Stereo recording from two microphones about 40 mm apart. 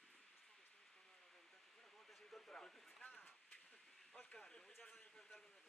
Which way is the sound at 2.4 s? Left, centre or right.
Centre.